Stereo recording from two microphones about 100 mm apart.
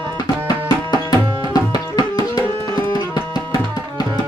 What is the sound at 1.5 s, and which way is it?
Tabla, 45° left (ahead or behind).